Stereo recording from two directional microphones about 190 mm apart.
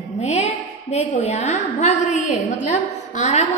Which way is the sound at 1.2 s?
35° left (ahead or behind).